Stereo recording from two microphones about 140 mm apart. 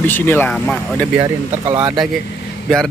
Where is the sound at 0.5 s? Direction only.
5° left (ahead or behind).